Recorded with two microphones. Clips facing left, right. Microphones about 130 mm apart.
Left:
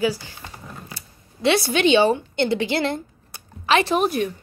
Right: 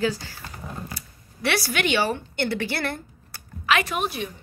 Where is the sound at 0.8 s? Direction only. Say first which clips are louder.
Right 3 dB; 25° left (ahead or behind).